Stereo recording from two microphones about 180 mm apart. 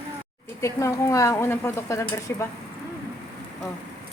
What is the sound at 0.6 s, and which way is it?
Speech, 15° left (ahead or behind).